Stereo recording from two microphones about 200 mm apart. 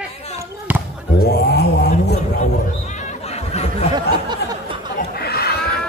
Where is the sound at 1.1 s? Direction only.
50° left (ahead or behind).